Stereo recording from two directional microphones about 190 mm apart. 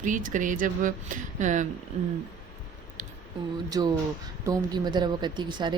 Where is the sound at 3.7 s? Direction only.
20° right (ahead or behind).